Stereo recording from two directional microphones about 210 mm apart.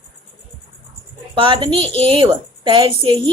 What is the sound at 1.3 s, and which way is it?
Speech, 25° right (ahead or behind).